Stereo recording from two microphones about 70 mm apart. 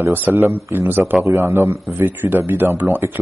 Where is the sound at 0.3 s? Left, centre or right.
Right.